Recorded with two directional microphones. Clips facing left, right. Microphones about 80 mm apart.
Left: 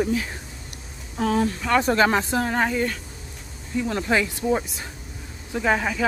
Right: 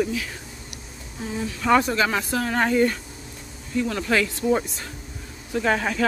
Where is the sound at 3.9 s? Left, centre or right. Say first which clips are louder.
Left 2 dB; left.